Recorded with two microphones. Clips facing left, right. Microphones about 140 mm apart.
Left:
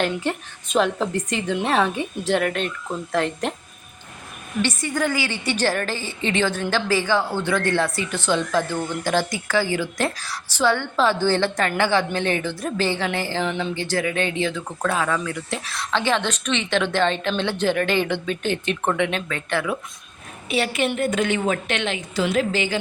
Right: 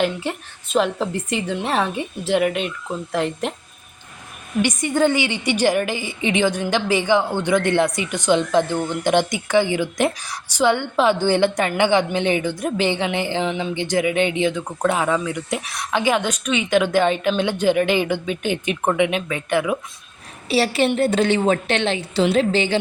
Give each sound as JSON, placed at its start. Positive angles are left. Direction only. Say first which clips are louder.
{"t": 0.0, "sound": "a woman's voice", "louder": "right 1 dB", "side_deg": -5}
{"t": 4.6, "sound": "a woman's voice", "louder": "right 5 dB", "side_deg": -20}
{"t": 20.5, "sound": "a woman's voice", "louder": "right 4 dB", "side_deg": -35}